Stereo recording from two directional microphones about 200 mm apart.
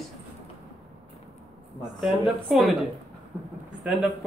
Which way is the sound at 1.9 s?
Centre (ahead or behind).